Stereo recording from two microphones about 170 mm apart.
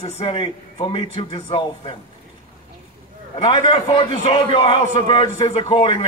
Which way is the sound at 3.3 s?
30° left (ahead or behind).